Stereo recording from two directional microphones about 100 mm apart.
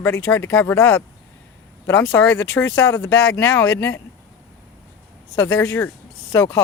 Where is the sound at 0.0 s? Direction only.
20° left (ahead or behind).